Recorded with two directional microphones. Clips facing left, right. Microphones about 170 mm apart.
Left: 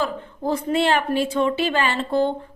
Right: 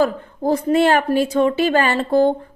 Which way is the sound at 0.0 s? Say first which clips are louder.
Right 6 dB; 40° right (ahead or behind).